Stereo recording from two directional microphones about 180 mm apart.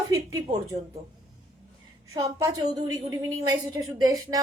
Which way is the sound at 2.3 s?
20° right (ahead or behind).